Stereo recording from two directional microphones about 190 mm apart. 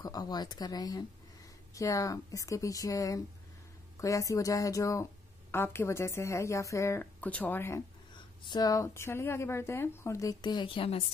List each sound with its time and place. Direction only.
0.0 s speech: 20° left (ahead or behind)